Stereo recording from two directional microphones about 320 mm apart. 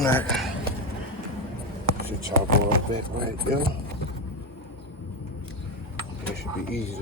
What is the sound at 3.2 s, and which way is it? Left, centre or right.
Speech, right.